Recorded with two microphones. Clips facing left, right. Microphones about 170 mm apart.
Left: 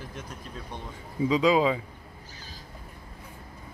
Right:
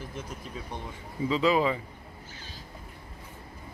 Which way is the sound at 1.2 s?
15° left (ahead or behind).